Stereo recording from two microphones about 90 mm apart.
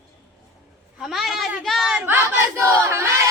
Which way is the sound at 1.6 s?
Centre (ahead or behind).